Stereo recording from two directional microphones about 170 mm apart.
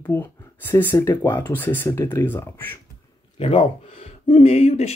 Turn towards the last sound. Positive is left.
turn(degrees=40)  # may be behind; listen again after turning